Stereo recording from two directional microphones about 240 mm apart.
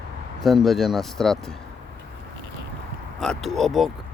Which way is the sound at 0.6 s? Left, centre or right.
Centre.